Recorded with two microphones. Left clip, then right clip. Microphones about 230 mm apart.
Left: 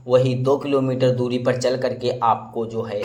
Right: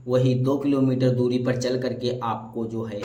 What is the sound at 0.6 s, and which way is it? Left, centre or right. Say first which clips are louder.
A man's voice: left 3 dB; left.